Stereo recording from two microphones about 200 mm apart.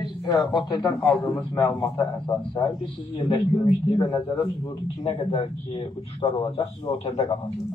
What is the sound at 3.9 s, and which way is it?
Speech, 20° left (ahead or behind).